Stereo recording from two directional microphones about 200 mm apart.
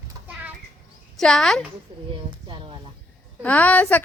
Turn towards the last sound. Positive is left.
turn(degrees=10)  # may be behind; listen again after turning